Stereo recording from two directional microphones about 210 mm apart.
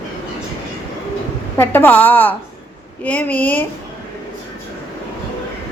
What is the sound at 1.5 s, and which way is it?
A woman's voice, 10° left (ahead or behind).